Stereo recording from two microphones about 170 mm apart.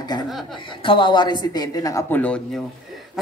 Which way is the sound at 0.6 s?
30° left (ahead or behind).